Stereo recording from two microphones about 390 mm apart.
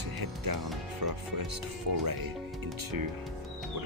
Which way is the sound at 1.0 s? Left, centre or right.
Right.